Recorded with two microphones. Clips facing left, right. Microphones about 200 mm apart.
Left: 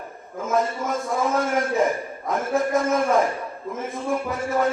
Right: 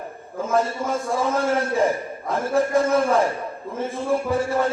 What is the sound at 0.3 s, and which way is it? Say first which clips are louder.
Speech: right 1 dB; 30° right (ahead or behind).